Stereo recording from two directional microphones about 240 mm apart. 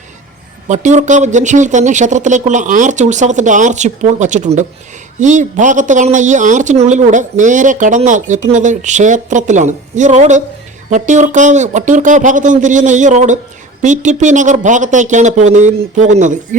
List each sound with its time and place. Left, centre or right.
0.7 s a man's voice: right